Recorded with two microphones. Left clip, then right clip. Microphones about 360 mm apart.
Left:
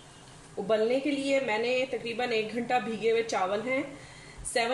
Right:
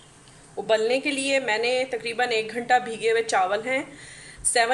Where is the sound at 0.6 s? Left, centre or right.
Right.